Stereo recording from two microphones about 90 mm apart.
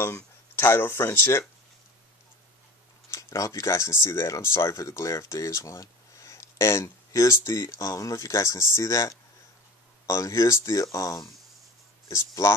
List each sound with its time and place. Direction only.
0.0 s speech: 25° left (ahead or behind)
3.1 s speech: 35° left (ahead or behind)